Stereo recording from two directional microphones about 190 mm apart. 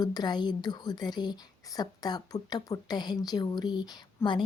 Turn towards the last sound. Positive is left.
turn(degrees=20)  # may be behind; listen again after turning